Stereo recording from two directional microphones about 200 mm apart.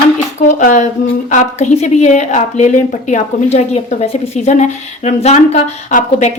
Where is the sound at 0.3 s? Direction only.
40° left (ahead or behind).